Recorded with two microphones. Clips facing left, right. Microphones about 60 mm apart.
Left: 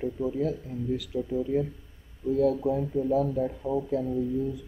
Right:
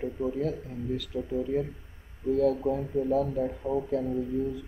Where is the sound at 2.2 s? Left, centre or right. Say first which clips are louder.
Even; right.